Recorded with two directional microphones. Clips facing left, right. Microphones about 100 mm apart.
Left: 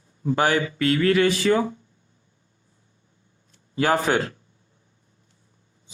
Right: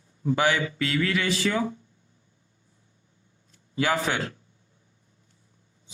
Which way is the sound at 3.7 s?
40° left (ahead or behind).